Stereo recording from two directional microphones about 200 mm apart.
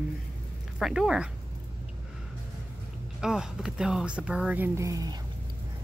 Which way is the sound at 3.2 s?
5° right (ahead or behind).